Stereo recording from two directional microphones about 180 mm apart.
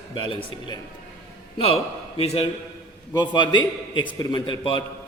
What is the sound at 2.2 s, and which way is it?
Speech, 35° left (ahead or behind).